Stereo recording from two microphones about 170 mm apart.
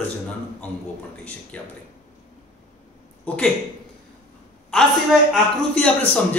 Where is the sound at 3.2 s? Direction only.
5° left (ahead or behind).